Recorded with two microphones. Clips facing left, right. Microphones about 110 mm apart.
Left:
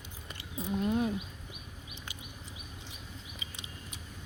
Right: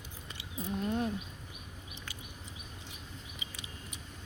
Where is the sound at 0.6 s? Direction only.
5° left (ahead or behind).